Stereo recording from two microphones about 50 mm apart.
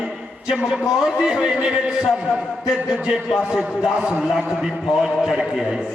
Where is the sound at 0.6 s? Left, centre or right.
Centre.